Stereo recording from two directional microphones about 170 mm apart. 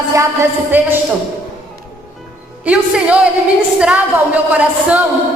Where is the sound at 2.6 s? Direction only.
5° right (ahead or behind).